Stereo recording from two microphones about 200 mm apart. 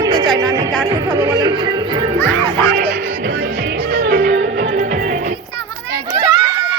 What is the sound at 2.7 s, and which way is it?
Music, 55° right (ahead or behind).